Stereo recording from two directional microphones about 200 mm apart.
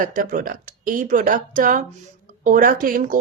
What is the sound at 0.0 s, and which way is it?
Speech, 45° right (ahead or behind).